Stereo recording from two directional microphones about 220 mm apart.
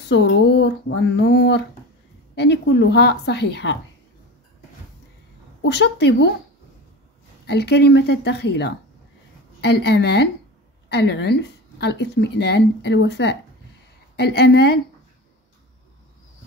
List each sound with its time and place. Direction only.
0.1 s speech: 50° left (ahead or behind)
5.6 s speech: 50° left (ahead or behind)
7.4 s speech: 50° left (ahead or behind)